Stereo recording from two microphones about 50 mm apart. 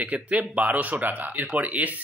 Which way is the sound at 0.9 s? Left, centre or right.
Right.